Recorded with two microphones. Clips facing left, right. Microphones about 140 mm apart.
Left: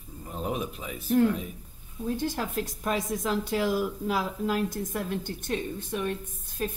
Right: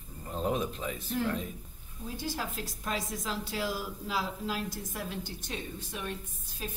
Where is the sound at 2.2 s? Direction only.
55° left (ahead or behind).